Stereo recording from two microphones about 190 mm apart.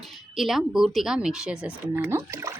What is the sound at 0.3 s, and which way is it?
Speech, centre (ahead or behind).